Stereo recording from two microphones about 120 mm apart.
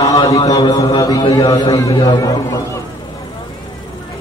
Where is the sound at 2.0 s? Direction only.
35° left (ahead or behind).